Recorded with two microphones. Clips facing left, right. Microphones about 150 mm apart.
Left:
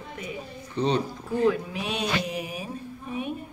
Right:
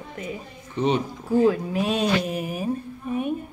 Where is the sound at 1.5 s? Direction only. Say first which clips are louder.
Right 5 dB; 40° right (ahead or behind).